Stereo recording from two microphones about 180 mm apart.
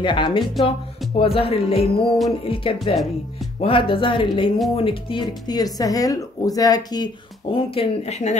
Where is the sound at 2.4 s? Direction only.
30° left (ahead or behind).